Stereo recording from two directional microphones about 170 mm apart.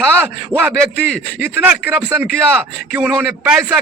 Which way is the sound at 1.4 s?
10° right (ahead or behind).